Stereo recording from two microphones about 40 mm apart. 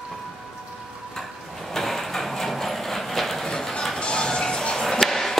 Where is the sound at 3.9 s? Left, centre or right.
Left; by 5.3 s centre.